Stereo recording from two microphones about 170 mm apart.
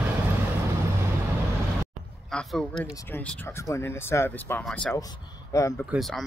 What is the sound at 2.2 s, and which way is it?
Speech, 5° left (ahead or behind).